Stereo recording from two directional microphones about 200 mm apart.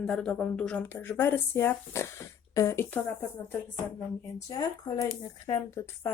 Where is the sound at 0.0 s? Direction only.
5° left (ahead or behind).